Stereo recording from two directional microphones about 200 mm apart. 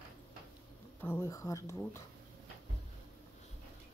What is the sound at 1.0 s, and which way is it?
Speech, 15° left (ahead or behind).